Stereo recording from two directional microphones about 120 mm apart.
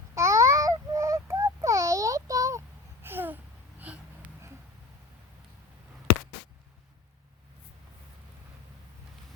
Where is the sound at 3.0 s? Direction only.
15° right (ahead or behind).